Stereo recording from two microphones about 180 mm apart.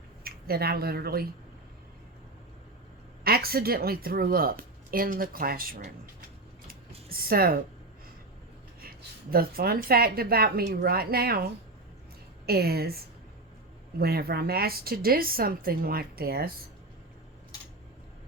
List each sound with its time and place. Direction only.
0.3 s speech: 60° right (ahead or behind)
3.2 s a woman's voice: 60° right (ahead or behind)
6.7 s typing: 55° right (ahead or behind)
8.8 s a woman's voice: 55° right (ahead or behind)
12.5 s a woman's voice: 60° right (ahead or behind)
14.0 s a woman's voice: 60° right (ahead or behind)